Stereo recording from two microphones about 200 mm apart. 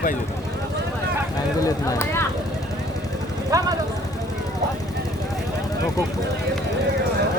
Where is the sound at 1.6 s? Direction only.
15° left (ahead or behind).